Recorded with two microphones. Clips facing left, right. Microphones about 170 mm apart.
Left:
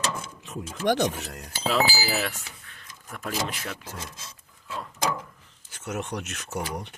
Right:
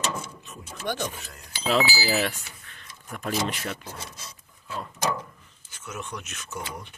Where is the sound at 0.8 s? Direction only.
85° left.